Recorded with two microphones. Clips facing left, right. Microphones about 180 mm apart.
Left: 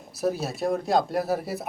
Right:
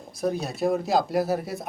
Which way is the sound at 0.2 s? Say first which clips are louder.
Right 1 dB; 5° left (ahead or behind).